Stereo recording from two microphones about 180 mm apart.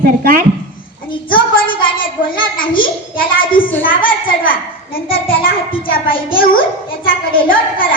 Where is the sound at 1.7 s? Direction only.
50° left (ahead or behind).